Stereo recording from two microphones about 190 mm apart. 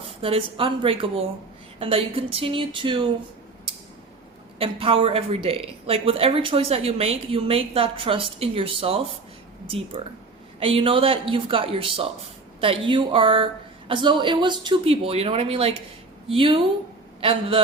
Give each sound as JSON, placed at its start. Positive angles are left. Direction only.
{"t": 0.2, "sound": "a woman's voice", "side_deg": -30}
{"t": 4.5, "sound": "a woman's voice", "side_deg": -30}